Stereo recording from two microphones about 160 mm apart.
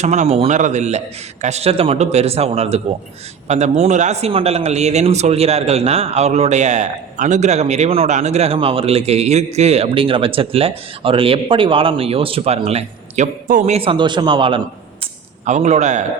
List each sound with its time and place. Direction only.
0.0 s a man's voice: 45° right (ahead or behind)
15.4 s a man's voice: 50° right (ahead or behind)